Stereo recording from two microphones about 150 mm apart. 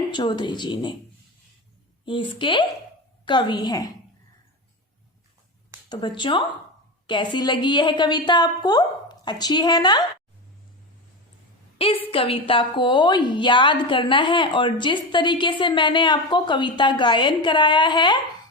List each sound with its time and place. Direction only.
0.1 s a woman's voice: 30° left (ahead or behind)
2.0 s a woman's voice: 35° left (ahead or behind)
5.9 s a woman's voice: 30° left (ahead or behind)
11.8 s a woman's voice: 40° left (ahead or behind)